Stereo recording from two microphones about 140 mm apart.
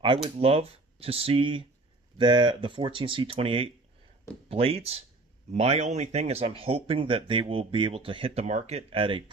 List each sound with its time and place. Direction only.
0.4 s speech: 45° right (ahead or behind)
8.5 s speech: 55° right (ahead or behind)